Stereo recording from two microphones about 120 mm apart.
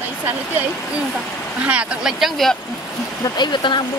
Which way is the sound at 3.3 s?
40° left (ahead or behind).